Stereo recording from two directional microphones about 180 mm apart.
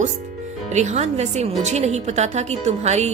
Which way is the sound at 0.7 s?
40° right (ahead or behind).